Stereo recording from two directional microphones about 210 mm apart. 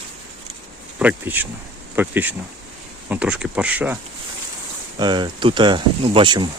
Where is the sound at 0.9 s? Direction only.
10° right (ahead or behind).